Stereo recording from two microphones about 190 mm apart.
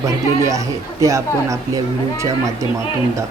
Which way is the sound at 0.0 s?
15° right (ahead or behind).